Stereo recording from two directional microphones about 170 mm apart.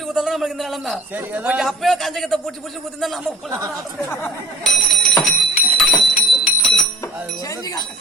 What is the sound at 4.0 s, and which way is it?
Speech, 15° left (ahead or behind).